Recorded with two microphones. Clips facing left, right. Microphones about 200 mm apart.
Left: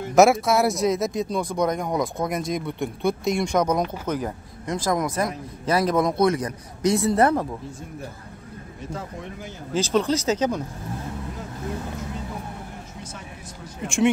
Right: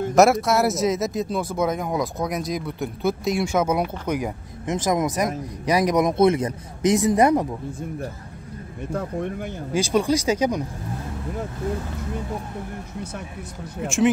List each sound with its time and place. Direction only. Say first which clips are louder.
0.1 s speech: left 1 dB; centre (ahead or behind); by 7.4 s 15° right (ahead or behind)
8.9 s speech: right 8 dB; 60° right (ahead or behind)
9.7 s speech: right 1 dB; 10° right (ahead or behind)